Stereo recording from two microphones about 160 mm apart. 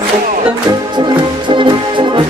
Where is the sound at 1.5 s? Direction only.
30° right (ahead or behind).